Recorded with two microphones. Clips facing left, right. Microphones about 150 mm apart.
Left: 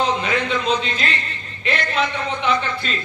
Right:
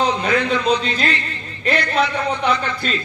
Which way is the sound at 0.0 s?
40° right (ahead or behind).